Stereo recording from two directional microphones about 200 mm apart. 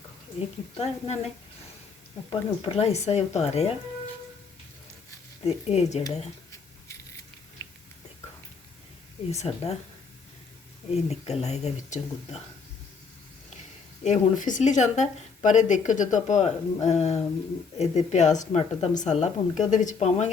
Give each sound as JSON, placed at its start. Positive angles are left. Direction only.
{"t": 0.8, "sound": "speech", "side_deg": 30}
{"t": 2.3, "sound": "speech", "side_deg": 30}
{"t": 5.4, "sound": "speech", "side_deg": 30}
{"t": 9.3, "sound": "speech", "side_deg": 35}
{"t": 10.9, "sound": "speech", "side_deg": 30}
{"t": 14.0, "sound": "speech", "side_deg": 40}